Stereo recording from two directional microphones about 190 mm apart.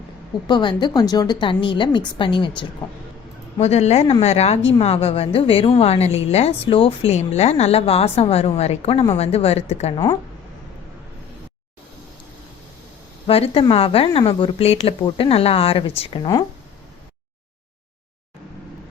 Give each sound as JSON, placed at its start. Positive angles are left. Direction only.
{"t": 0.4, "sound": "speech", "side_deg": 25}
{"t": 3.6, "sound": "a woman's voice", "side_deg": 35}
{"t": 13.2, "sound": "speech", "side_deg": 30}